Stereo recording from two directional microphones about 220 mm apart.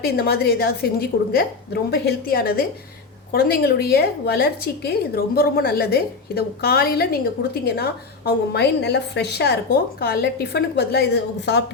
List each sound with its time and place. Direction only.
0.0 s a woman's voice: 45° left (ahead or behind)